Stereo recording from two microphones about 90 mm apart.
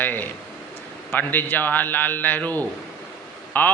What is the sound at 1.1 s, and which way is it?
A man's voice, 20° left (ahead or behind).